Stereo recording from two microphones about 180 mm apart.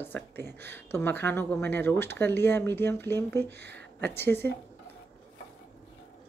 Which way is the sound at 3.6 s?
70° right (ahead or behind).